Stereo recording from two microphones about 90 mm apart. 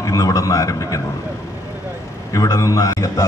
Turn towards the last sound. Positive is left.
turn(degrees=35)  # may be behind; listen again after turning